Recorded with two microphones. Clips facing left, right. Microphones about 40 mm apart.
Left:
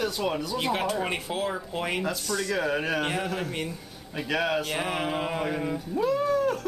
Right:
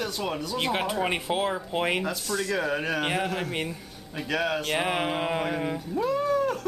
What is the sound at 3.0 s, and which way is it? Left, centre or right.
Mantra, centre.